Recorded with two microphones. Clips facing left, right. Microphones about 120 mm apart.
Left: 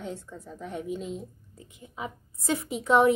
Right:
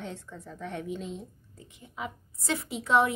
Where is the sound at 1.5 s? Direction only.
25° left (ahead or behind).